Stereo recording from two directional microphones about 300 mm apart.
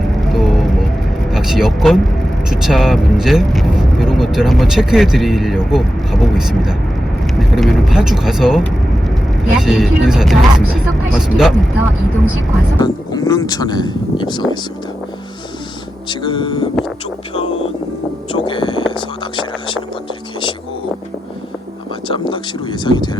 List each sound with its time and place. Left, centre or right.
0.3 s music: centre
1.3 s vehicle: centre
2.5 s speech: centre
12.8 s speech: centre
16.0 s speech: centre
18.3 s a sound: centre
22.0 s speech: centre